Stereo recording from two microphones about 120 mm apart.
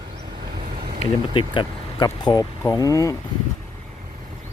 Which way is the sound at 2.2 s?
35° left (ahead or behind).